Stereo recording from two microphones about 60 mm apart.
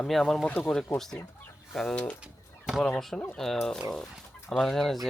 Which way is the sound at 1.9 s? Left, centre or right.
Centre.